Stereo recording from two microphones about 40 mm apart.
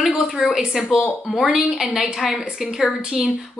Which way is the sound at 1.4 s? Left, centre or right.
Centre.